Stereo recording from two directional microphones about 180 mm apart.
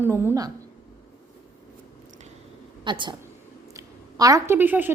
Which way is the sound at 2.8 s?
25° right (ahead or behind).